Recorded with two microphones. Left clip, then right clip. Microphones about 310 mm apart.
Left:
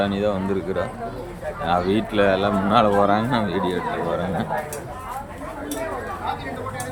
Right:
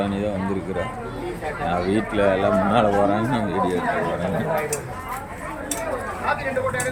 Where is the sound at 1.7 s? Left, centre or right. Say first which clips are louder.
Left 3 dB; centre.